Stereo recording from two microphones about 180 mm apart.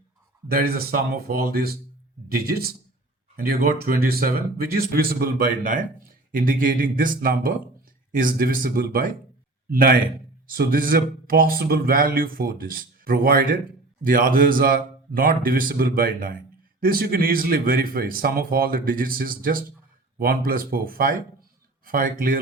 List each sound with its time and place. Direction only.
0.5 s speech: 55° right (ahead or behind)